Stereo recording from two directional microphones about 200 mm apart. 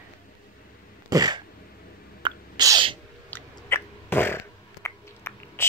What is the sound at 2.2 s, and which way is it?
Sneeze, 20° right (ahead or behind).